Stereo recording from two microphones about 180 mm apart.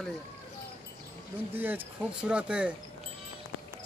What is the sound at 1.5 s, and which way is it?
Speech, 10° right (ahead or behind).